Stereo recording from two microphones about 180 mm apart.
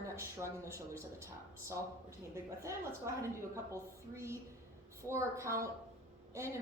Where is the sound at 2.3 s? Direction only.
15° right (ahead or behind).